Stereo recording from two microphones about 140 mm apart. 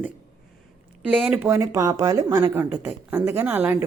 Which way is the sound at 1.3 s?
15° right (ahead or behind).